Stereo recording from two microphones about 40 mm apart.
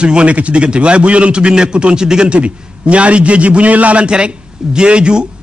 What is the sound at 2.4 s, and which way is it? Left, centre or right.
A man's voice, right.